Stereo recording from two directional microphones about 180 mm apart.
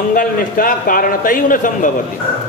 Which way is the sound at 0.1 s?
50° left (ahead or behind).